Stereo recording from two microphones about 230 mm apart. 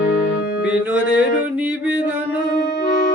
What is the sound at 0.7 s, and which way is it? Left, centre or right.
Music, centre.